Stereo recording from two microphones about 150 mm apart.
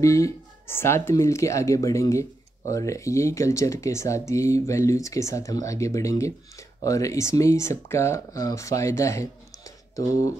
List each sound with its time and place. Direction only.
0.0 s speech: 20° left (ahead or behind)